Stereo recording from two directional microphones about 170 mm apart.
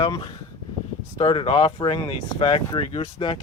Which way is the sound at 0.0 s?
25° left (ahead or behind).